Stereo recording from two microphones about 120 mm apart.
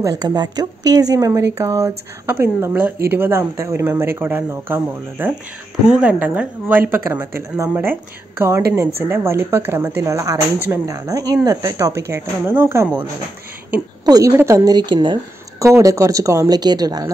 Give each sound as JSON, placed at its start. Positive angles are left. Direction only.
{"t": 0.0, "sound": "speech", "side_deg": -35}
{"t": 14.0, "sound": "a woman's voice", "side_deg": -30}
{"t": 15.6, "sound": "speech", "side_deg": -25}